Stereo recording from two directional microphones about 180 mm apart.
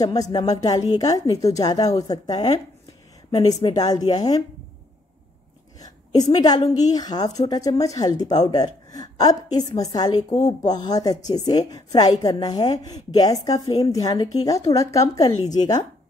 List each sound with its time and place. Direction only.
0.0 s a woman's voice: 20° left (ahead or behind)
5.8 s a woman's voice: 20° left (ahead or behind)